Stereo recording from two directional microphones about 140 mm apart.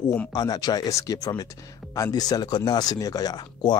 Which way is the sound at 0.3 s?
30° left (ahead or behind).